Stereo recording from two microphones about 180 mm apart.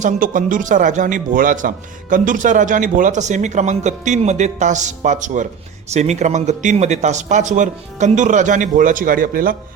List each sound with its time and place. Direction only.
0.0 s a man's voice: 50° right (ahead or behind)